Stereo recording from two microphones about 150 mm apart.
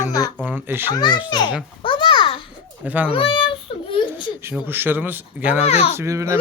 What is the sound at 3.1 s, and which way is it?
Baby cry, 35° left (ahead or behind).